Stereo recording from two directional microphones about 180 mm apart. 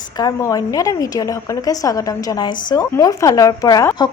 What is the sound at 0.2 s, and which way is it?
Speech, 20° left (ahead or behind).